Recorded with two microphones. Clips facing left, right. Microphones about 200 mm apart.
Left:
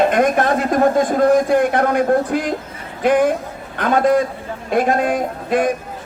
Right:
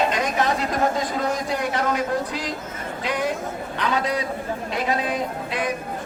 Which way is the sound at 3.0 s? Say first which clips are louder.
Left 11 dB; 50° left (ahead or behind).